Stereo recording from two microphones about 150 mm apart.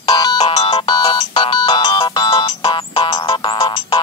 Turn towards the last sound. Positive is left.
turn(degrees=35)  # may be behind; listen again after turning